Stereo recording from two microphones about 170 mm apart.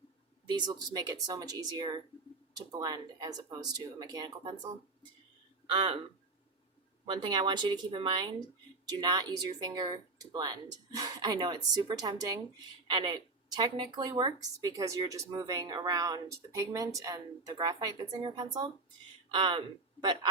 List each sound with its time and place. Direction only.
0.4 s a woman's voice: 25° right (ahead or behind)
5.7 s a woman's voice: 30° right (ahead or behind)
7.0 s a woman's voice: 25° right (ahead or behind)